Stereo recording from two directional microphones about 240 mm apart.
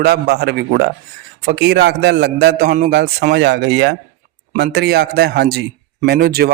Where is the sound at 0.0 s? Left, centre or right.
Right.